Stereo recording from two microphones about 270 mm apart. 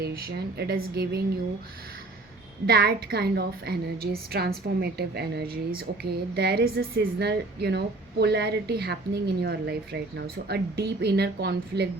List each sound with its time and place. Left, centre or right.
0.0 s a woman's voice: right
2.6 s a woman's voice: right